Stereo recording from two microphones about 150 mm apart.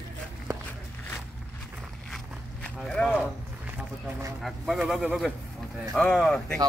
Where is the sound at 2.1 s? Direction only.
5° left (ahead or behind).